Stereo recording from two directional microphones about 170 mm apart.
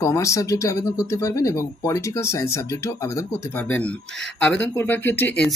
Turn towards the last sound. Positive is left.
turn(degrees=10)  # may be behind; listen again after turning